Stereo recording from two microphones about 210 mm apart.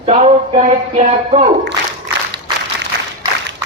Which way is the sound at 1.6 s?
60° right (ahead or behind).